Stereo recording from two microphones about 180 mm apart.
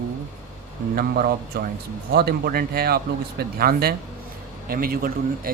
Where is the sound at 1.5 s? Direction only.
55° right (ahead or behind).